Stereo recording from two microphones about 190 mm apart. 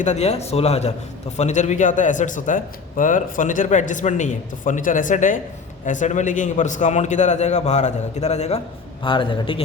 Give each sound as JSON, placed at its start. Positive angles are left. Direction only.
{"t": 0.0, "sound": "a man's voice", "side_deg": 35}